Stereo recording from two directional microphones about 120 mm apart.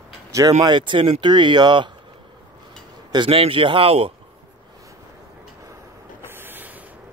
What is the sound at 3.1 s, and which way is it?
Speech, 45° right (ahead or behind).